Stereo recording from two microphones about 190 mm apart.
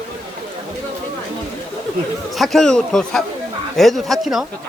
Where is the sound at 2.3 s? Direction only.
Centre (ahead or behind).